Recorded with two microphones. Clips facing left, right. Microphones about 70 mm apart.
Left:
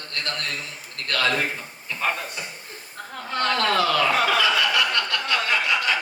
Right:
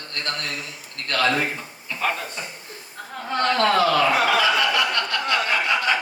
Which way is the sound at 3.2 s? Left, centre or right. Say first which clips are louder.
Right 3 dB; right.